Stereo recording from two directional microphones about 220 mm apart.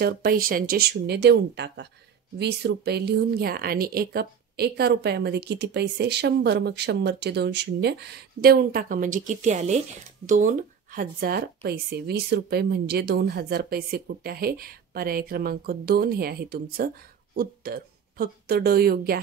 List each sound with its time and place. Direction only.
0.0 s speech: 40° right (ahead or behind)